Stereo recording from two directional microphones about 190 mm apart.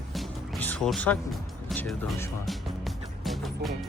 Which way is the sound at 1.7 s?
Centre (ahead or behind).